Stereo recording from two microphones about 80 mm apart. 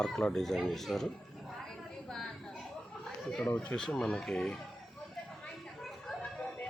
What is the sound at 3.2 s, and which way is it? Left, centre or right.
Speech, centre.